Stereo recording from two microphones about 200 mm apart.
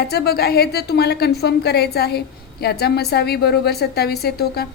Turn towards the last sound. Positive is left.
turn(degrees=50)  # may be behind; listen again after turning